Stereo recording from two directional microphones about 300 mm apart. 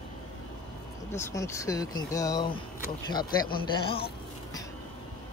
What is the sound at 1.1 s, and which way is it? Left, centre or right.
Speech, centre.